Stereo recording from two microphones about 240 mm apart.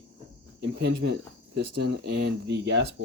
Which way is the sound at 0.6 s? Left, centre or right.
Right.